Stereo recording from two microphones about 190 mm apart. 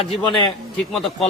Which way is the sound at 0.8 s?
Centre (ahead or behind).